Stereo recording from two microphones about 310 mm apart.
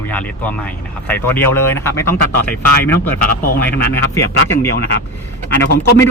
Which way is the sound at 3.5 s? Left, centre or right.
Left.